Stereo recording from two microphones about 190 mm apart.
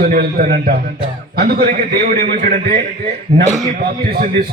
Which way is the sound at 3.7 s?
50° right (ahead or behind).